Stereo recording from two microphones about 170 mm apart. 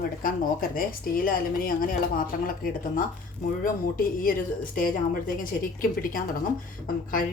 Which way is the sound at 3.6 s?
55° left (ahead or behind).